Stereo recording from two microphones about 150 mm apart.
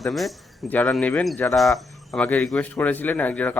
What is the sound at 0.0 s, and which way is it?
A man's voice, centre (ahead or behind).